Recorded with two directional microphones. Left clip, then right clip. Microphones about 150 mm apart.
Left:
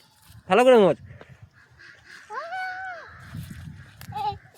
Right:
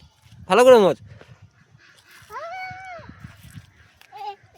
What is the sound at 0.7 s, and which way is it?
Speech, 30° right (ahead or behind).